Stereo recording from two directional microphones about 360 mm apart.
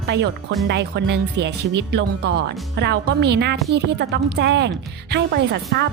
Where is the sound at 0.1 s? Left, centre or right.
Right.